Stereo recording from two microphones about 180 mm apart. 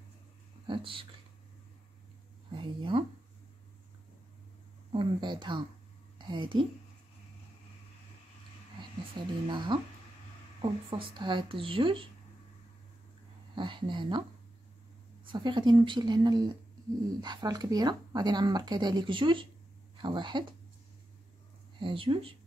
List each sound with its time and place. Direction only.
0.7 s speech: 30° right (ahead or behind)
2.5 s speech: 30° right (ahead or behind)
4.9 s a woman's voice: 25° right (ahead or behind)
9.1 s speech: 25° right (ahead or behind)
13.6 s speech: 25° right (ahead or behind)
15.3 s speech: 25° right (ahead or behind)
21.7 s speech: 30° right (ahead or behind)